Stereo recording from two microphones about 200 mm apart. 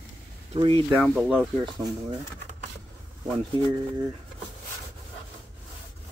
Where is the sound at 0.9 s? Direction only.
5° right (ahead or behind).